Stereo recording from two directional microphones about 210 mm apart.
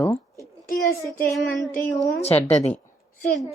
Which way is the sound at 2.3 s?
30° left (ahead or behind).